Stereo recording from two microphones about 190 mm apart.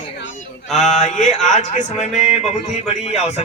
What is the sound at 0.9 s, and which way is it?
Music, 40° left (ahead or behind).